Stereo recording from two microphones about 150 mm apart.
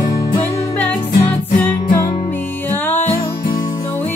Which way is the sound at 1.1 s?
65° left (ahead or behind).